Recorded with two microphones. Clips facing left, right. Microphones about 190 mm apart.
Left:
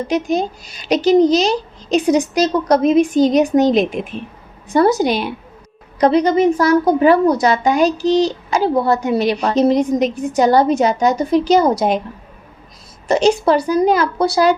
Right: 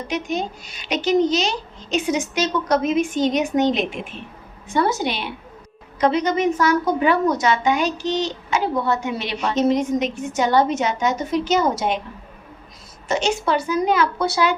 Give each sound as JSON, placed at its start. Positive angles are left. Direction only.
{"t": 0.1, "sound": "a woman's voice", "side_deg": 35}
{"t": 13.1, "sound": "a woman's voice", "side_deg": 35}